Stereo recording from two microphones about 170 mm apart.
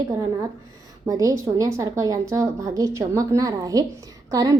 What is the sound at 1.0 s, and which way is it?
A woman's voice, 20° right (ahead or behind).